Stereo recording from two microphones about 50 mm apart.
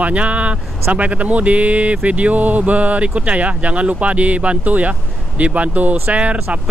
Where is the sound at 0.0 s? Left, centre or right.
Right.